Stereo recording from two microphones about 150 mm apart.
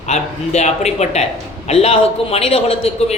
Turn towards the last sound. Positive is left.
turn(degrees=45)  # may be behind; listen again after turning